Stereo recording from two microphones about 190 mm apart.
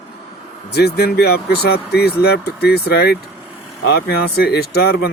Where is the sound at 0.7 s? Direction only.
55° left (ahead or behind).